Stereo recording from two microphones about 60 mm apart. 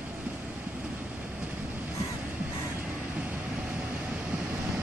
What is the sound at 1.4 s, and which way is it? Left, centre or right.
Vehicle, right.